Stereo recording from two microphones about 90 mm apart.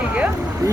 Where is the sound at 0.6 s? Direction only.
40° right (ahead or behind).